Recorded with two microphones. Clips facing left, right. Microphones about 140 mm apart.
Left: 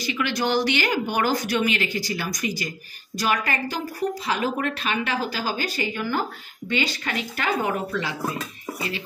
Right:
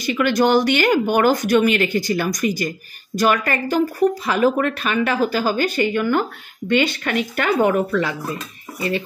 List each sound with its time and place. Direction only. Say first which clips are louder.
0.0 s speech: right 8 dB; 50° right (ahead or behind)